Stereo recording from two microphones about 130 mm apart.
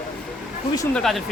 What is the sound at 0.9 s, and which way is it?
Speech, 5° left (ahead or behind).